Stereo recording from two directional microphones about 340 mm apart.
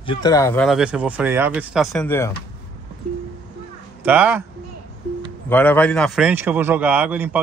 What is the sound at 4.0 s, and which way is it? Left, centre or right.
Speech, centre.